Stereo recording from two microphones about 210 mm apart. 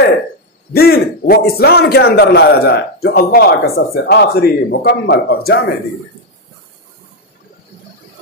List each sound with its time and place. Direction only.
0.7 s a man's voice: 50° left (ahead or behind)